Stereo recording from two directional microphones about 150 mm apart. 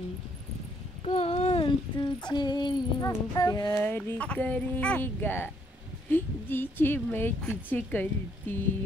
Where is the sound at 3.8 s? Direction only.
10° left (ahead or behind).